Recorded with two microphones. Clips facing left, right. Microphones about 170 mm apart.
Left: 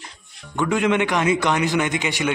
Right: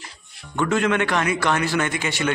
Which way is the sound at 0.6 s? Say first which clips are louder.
Left 1 dB; 15° left (ahead or behind).